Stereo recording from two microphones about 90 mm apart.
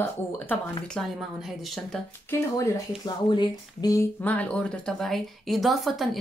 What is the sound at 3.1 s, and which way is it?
Speech, 55° left (ahead or behind).